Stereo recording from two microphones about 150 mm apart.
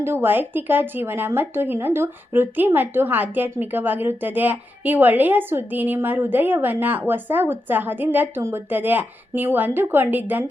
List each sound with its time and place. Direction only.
0.0 s speech: 15° right (ahead or behind)